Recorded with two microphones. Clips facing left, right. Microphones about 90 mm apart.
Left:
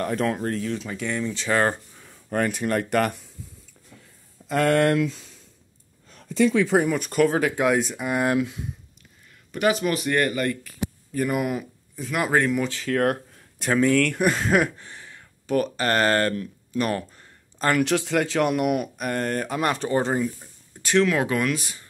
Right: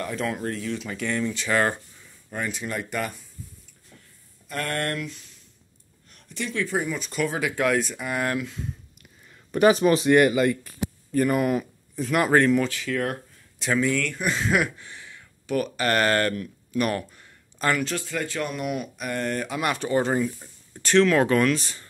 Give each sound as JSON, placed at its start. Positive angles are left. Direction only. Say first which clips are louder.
{"t": 0.0, "sound": "speech", "louder": "left 4 dB", "side_deg": 45}
{"t": 0.8, "sound": "speech", "louder": "even", "side_deg": 20}
{"t": 1.3, "sound": "speech", "louder": "left 3 dB", "side_deg": 30}
{"t": 2.0, "sound": "speech", "louder": "left 7 dB", "side_deg": 55}
{"t": 4.5, "sound": "speech", "louder": "left 9 dB", "side_deg": 90}
{"t": 6.7, "sound": "speech", "louder": "left 6 dB", "side_deg": 60}
{"t": 7.5, "sound": "speech", "louder": "left 2 dB", "side_deg": 15}
{"t": 9.5, "sound": "speech", "louder": "right 4 dB", "side_deg": -35}
{"t": 10.1, "sound": "speech", "louder": "right 5 dB", "side_deg": -15}
{"t": 11.1, "sound": "speech", "louder": "right 3 dB", "side_deg": 5}
{"t": 12.8, "sound": "a sound", "louder": "left 5 dB", "side_deg": 55}
{"t": 13.7, "sound": "speech", "louder": "left 4 dB", "side_deg": 45}
{"t": 17.7, "sound": "speech", "louder": "left 6 dB", "side_deg": 80}
{"t": 20.8, "sound": "speech", "louder": "right 2 dB", "side_deg": 10}